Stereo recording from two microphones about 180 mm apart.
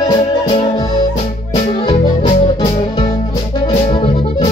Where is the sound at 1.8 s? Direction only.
35° left (ahead or behind).